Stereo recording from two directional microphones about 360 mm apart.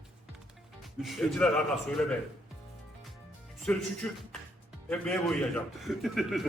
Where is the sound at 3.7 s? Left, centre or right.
Centre.